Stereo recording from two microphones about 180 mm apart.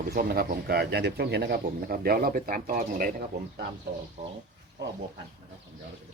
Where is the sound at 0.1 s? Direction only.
55° right (ahead or behind).